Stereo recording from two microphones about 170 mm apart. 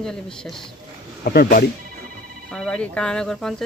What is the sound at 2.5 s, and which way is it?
Speech, 5° left (ahead or behind).